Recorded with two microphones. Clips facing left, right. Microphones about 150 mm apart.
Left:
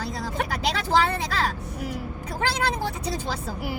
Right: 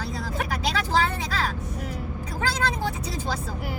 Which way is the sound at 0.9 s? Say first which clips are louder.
Left 4 dB; 65° left (ahead or behind).